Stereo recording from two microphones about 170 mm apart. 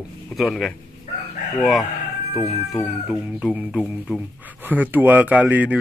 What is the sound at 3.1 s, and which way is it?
Speech, 5° right (ahead or behind).